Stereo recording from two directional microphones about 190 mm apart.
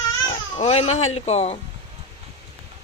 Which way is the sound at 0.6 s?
35° left (ahead or behind).